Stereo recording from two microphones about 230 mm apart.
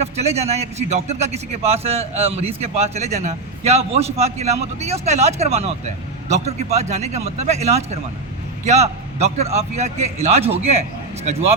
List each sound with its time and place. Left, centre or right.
0.0 s a man's voice: right